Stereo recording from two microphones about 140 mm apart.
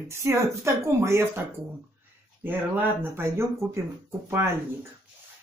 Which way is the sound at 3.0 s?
20° right (ahead or behind).